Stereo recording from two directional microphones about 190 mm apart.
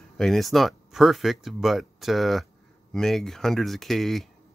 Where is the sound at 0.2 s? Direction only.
Centre (ahead or behind).